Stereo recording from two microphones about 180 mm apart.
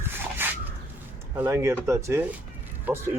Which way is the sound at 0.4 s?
10° right (ahead or behind).